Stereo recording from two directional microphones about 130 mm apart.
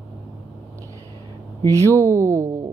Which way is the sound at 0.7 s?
25° right (ahead or behind).